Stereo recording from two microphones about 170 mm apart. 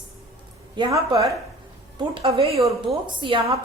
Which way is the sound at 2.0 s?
35° right (ahead or behind).